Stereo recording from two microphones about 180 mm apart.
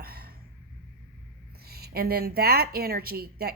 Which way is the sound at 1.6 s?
60° right (ahead or behind).